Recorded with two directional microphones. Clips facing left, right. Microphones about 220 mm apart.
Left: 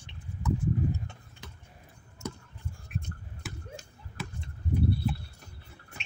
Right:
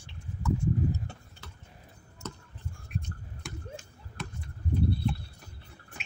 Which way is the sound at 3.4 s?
5° left (ahead or behind).